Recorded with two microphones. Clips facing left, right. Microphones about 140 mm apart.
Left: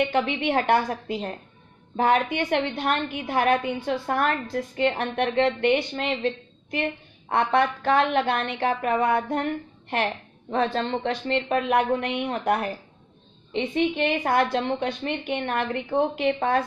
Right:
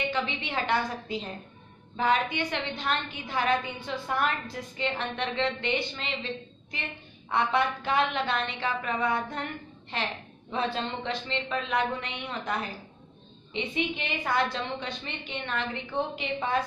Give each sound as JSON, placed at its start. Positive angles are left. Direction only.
{"t": 0.1, "sound": "a woman's voice", "side_deg": 55}
{"t": 13.9, "sound": "a woman's voice", "side_deg": 50}